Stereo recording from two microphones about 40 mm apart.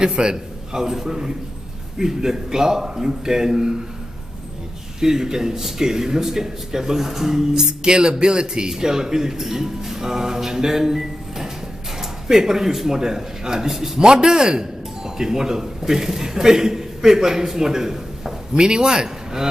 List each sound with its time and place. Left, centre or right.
0.0 s speech: right
5.0 s speech: centre
14.0 s a man's voice: centre